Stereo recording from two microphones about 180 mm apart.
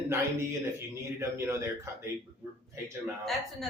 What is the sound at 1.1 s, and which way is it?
Speech, 15° right (ahead or behind).